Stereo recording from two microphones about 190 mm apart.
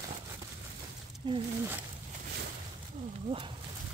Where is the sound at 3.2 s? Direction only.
25° right (ahead or behind).